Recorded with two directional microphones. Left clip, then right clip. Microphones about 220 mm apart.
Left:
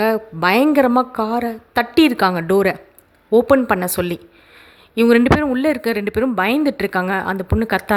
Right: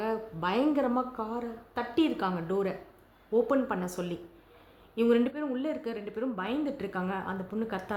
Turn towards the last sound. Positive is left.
turn(degrees=40)  # may be behind; listen again after turning